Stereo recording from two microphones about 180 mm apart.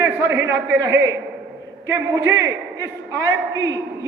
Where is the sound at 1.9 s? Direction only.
20° right (ahead or behind).